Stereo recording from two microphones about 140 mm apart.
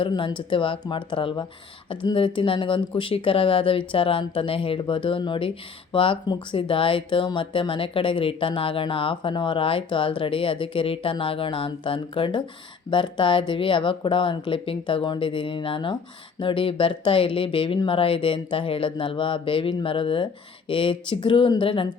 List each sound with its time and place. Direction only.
0.0 s speech: 35° left (ahead or behind)